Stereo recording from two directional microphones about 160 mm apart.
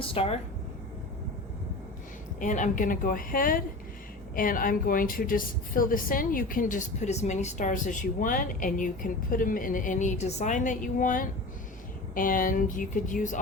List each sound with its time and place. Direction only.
0.0 s a woman's voice: 35° left (ahead or behind)
2.4 s a woman's voice: 55° left (ahead or behind)